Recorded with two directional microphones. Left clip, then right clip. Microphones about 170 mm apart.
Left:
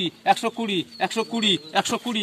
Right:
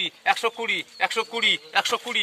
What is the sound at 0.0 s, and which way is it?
Speech, 35° left (ahead or behind).